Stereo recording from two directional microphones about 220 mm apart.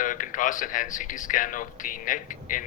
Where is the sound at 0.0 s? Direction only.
35° left (ahead or behind).